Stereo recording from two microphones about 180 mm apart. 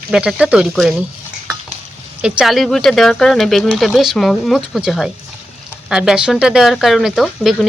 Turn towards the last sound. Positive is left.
turn(degrees=0)  # may be behind; listen again after turning